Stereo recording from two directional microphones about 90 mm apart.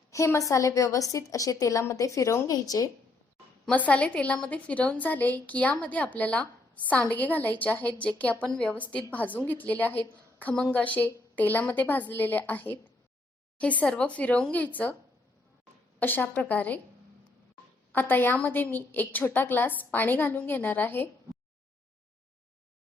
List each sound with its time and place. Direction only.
0.3 s a woman's voice: 35° left (ahead or behind)
3.7 s a woman's voice: 15° left (ahead or behind)
10.4 s a woman's voice: 10° left (ahead or behind)
16.0 s a woman's voice: 20° left (ahead or behind)
17.9 s a woman's voice: 20° left (ahead or behind)